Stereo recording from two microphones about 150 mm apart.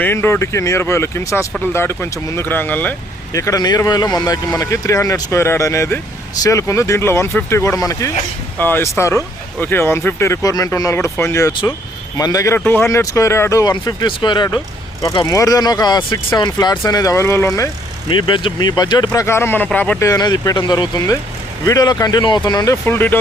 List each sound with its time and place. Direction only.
0.0 s speech: 15° left (ahead or behind)
3.3 s speech: 20° left (ahead or behind)
18.1 s speech: 30° left (ahead or behind)
19.2 s speech: 15° left (ahead or behind)
20.1 s speech: 25° left (ahead or behind)